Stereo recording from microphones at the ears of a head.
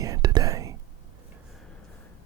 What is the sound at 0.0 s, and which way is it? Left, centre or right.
Whispering, right.